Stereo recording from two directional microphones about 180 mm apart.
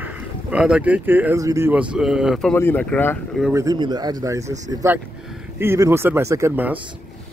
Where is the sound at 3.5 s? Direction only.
20° right (ahead or behind).